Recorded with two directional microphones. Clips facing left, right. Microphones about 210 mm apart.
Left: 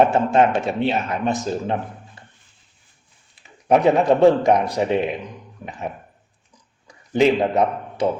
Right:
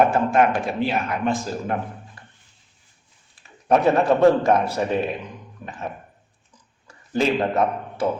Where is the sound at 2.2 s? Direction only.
25° left (ahead or behind).